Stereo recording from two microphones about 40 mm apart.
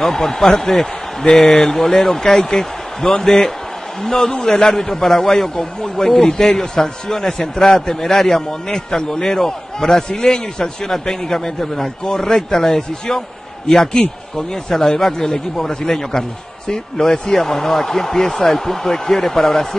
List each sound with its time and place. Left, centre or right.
0.0 s a man's voice: centre